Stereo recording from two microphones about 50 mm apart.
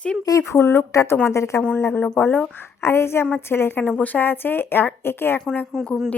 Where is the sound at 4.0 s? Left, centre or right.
Left.